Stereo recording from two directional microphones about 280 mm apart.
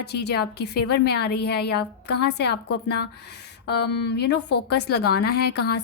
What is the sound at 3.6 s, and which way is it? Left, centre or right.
A woman's voice, left.